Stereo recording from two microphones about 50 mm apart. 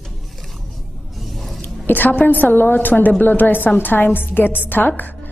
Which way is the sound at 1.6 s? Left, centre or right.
Left.